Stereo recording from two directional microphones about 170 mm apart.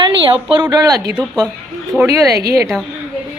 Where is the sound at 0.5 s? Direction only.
25° right (ahead or behind).